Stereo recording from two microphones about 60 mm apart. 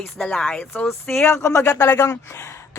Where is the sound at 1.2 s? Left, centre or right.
Left.